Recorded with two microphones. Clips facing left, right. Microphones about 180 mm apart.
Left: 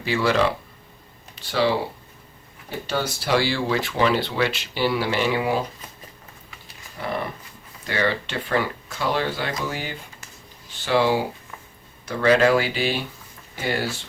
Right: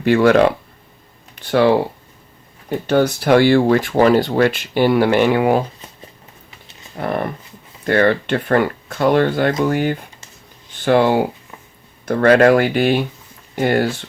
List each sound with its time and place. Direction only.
0.0 s speech: 55° right (ahead or behind)
6.5 s dog: 20° right (ahead or behind)
6.9 s speech: 55° right (ahead or behind)